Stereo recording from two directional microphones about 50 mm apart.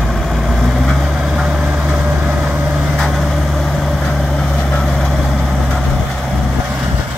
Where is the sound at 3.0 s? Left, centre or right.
Centre.